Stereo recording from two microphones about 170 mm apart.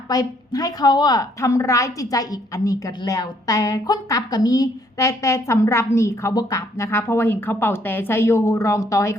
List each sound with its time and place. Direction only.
0.1 s a woman's voice: 20° left (ahead or behind)